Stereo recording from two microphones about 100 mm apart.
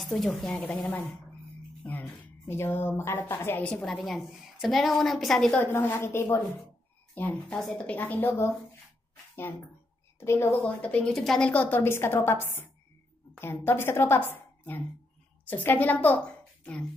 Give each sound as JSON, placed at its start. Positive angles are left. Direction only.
{"t": 0.0, "sound": "a woman's voice", "side_deg": 5}
{"t": 3.6, "sound": "a woman's voice", "side_deg": 5}
{"t": 5.6, "sound": "a woman's voice", "side_deg": 20}
{"t": 7.5, "sound": "a woman's voice", "side_deg": 5}
{"t": 10.2, "sound": "a woman's voice", "side_deg": 25}
{"t": 10.6, "sound": "a woman's voice", "side_deg": 15}